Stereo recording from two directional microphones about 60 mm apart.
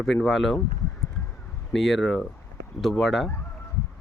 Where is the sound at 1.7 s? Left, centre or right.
Centre.